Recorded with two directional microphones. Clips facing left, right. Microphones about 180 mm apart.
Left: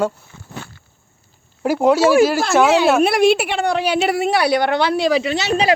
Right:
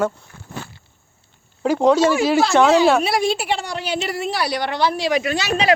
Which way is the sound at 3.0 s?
65° left (ahead or behind).